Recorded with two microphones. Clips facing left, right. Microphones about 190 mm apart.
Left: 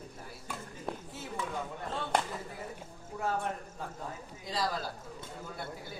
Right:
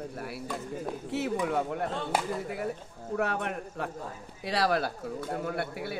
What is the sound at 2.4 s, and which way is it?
Speech, 70° right (ahead or behind).